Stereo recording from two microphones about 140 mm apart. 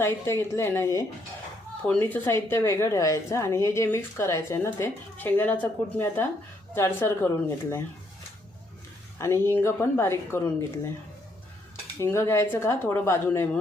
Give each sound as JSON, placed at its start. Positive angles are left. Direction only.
{"t": 0.0, "sound": "a woman's voice", "side_deg": 15}
{"t": 9.1, "sound": "a woman's voice", "side_deg": 20}
{"t": 12.0, "sound": "a woman's voice", "side_deg": 20}